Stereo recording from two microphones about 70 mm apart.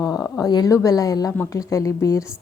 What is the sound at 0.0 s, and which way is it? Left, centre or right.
A woman's voice, left.